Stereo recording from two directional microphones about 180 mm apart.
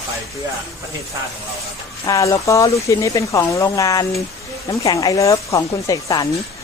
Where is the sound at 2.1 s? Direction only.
15° left (ahead or behind).